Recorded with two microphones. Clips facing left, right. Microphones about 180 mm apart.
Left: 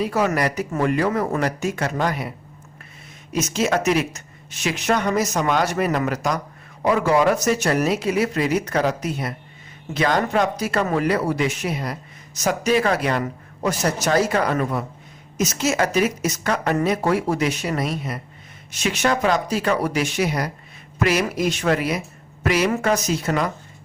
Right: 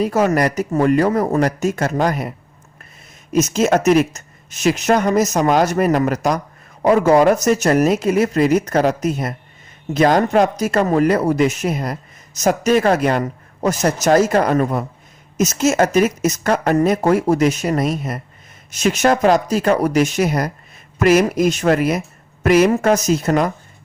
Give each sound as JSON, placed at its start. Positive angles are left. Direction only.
{"t": 0.0, "sound": "speech", "side_deg": -45}
{"t": 3.3, "sound": "speech", "side_deg": -45}